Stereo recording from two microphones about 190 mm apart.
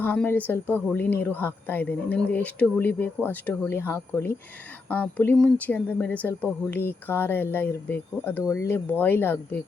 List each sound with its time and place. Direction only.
0.0 s a woman's voice: 10° left (ahead or behind)